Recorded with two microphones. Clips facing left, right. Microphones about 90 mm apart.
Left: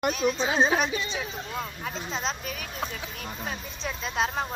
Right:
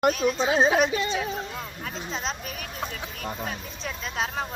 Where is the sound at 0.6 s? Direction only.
10° right (ahead or behind).